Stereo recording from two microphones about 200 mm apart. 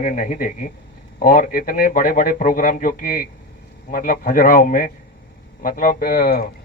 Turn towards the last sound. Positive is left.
turn(degrees=45)  # may be behind; listen again after turning